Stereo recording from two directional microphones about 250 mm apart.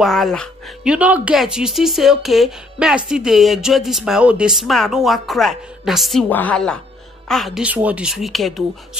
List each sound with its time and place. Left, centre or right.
0.0 s speech: centre